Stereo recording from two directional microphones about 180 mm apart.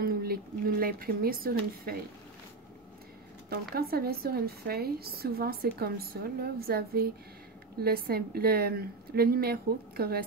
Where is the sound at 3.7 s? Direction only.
60° right (ahead or behind).